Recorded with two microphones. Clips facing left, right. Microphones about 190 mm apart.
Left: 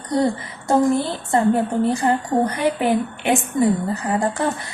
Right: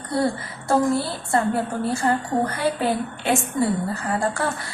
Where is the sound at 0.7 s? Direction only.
20° left (ahead or behind).